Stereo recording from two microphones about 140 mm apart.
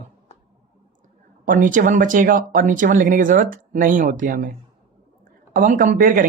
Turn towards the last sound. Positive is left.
turn(degrees=-75)  # may be behind; listen again after turning